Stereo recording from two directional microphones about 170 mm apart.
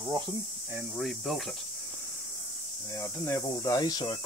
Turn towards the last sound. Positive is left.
turn(degrees=25)  # may be behind; listen again after turning